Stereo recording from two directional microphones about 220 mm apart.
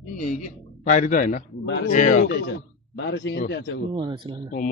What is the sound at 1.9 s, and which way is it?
A man's voice, 35° left (ahead or behind).